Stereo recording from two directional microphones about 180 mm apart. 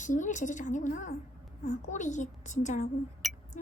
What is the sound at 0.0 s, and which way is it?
A woman's voice, 45° left (ahead or behind).